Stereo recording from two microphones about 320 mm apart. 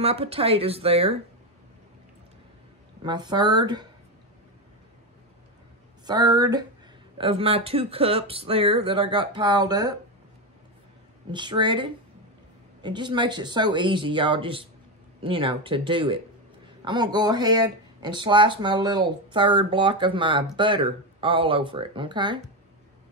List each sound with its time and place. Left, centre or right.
0.0 s speech: centre
3.0 s speech: centre
6.0 s speech: centre
11.3 s speech: centre